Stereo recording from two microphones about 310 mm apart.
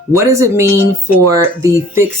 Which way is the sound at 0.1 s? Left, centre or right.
Centre.